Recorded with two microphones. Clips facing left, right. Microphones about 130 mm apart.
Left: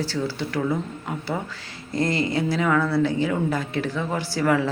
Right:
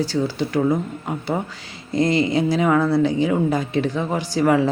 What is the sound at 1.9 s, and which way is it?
Speech, 15° right (ahead or behind).